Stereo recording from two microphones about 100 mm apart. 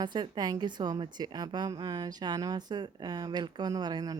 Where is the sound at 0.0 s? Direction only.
45° right (ahead or behind).